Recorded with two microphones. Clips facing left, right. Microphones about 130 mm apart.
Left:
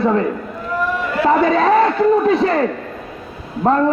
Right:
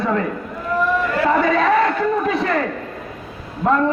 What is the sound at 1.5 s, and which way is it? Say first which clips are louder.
A man's voice: left 3 dB; 30° left (ahead or behind).